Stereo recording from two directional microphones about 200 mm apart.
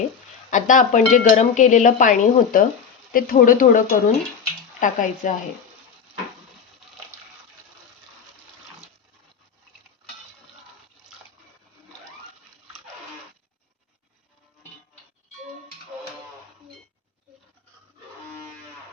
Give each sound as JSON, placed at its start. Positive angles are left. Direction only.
{"t": 0.5, "sound": "speech", "side_deg": 40}